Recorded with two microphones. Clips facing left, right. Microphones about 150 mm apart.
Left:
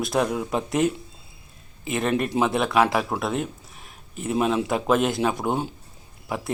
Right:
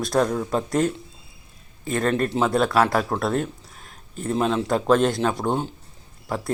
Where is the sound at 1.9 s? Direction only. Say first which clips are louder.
Right 1 dB; 10° left (ahead or behind).